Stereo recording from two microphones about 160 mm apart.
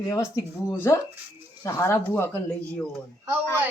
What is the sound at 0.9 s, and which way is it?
Speech, 20° left (ahead or behind).